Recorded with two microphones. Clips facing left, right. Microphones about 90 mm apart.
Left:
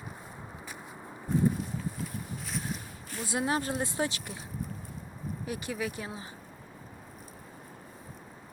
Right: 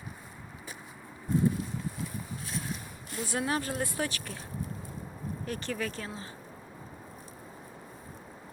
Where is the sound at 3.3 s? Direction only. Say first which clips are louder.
Left 2 dB; 20° left (ahead or behind).